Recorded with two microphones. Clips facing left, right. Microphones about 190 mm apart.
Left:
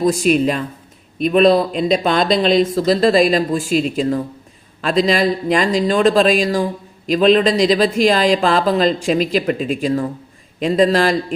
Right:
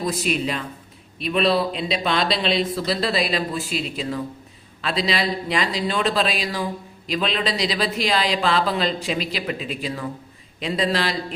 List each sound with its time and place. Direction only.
0.0 s speech: 45° left (ahead or behind)